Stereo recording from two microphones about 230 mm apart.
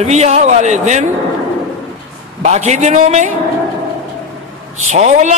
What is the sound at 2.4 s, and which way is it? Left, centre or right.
Speech, right.